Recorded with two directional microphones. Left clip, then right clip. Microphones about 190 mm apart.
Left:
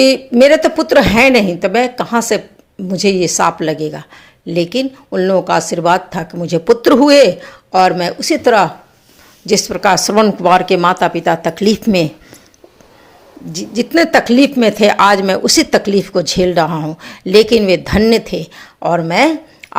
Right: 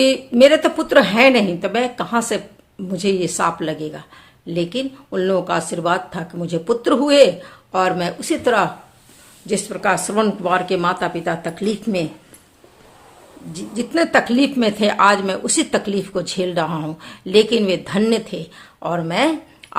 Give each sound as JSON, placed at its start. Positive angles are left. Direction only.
{"t": 0.0, "sound": "speech", "side_deg": 30}
{"t": 9.6, "sound": "speech", "side_deg": 40}
{"t": 13.5, "sound": "speech", "side_deg": 35}